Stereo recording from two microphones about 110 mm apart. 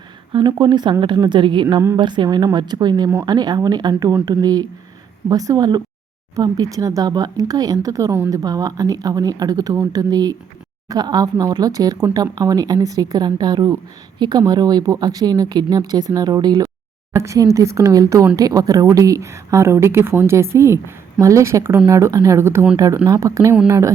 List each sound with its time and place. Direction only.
0.3 s speech: 45° right (ahead or behind)
17.1 s speech: 25° right (ahead or behind)